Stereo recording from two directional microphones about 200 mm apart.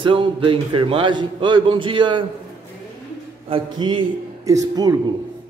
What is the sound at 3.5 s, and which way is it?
A man's voice, 25° right (ahead or behind).